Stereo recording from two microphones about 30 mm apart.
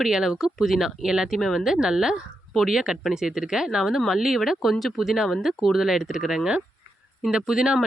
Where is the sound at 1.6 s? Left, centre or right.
Centre.